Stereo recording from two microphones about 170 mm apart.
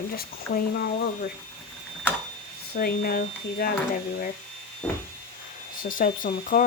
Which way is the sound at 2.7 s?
65° left (ahead or behind).